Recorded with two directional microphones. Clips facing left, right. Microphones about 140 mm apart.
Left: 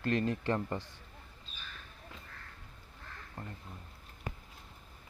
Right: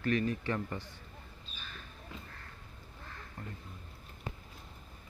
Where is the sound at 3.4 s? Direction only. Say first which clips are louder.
Left 1 dB; 35° left (ahead or behind).